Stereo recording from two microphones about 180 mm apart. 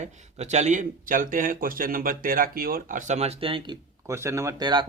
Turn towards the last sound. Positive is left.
turn(degrees=-25)  # may be behind; listen again after turning